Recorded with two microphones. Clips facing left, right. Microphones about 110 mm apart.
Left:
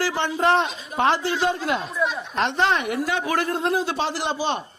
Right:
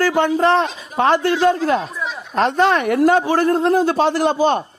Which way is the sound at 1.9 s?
Centre (ahead or behind).